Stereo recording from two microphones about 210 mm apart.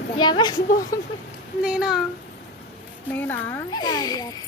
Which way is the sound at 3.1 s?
10° left (ahead or behind).